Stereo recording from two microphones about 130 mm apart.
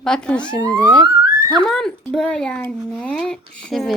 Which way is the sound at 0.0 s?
5° left (ahead or behind).